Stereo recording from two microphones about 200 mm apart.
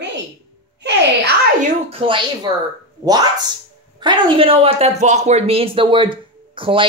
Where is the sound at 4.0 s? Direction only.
25° right (ahead or behind).